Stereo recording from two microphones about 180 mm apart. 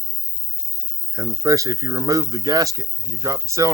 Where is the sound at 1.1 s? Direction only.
20° right (ahead or behind).